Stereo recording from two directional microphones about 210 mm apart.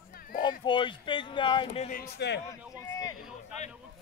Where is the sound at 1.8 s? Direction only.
45° left (ahead or behind).